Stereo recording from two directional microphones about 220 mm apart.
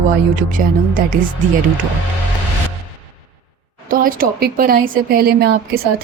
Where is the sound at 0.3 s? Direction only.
40° right (ahead or behind).